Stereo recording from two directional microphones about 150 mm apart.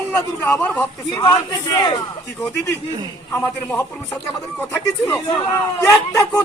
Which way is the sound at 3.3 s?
15° left (ahead or behind).